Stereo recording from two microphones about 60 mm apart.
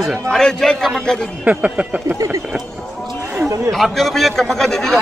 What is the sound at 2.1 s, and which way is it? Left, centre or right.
Speech, right.